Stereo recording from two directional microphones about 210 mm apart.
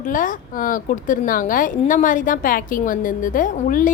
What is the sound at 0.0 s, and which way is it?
A woman's voice, 40° left (ahead or behind).